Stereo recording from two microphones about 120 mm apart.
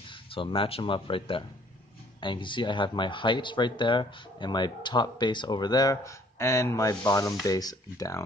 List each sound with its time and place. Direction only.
0.3 s speech: 50° left (ahead or behind); by 8.2 s 30° left (ahead or behind)